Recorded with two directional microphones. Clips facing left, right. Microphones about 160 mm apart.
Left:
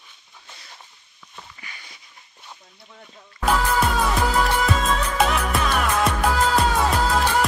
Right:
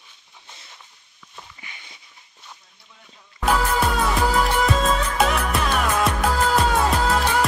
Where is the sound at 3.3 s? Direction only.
Centre (ahead or behind).